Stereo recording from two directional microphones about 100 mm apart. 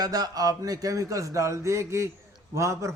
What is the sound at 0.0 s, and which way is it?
A man's voice, 40° right (ahead or behind).